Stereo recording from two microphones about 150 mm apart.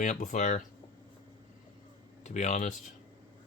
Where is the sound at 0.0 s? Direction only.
55° left (ahead or behind).